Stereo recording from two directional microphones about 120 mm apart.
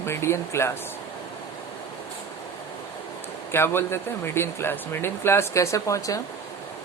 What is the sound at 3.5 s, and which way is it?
Speech, 20° left (ahead or behind).